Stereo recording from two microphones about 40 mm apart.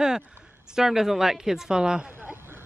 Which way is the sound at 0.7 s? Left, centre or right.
Centre.